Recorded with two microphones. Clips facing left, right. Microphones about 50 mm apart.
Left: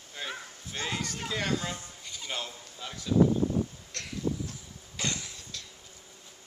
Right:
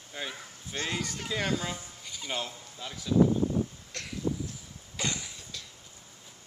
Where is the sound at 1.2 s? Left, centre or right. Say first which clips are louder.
Even; centre.